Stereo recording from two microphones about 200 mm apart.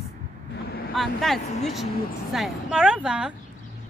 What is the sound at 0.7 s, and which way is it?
Vehicle, 50° left (ahead or behind).